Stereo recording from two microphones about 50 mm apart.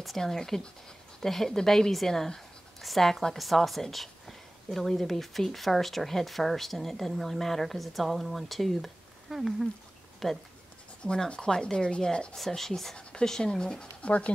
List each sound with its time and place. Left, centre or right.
0.2 s a woman's voice: centre
11.0 s speech: centre
12.4 s speech: centre
14.0 s speech: left